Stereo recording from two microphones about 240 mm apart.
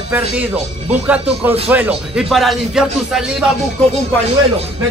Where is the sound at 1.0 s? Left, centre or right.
Centre.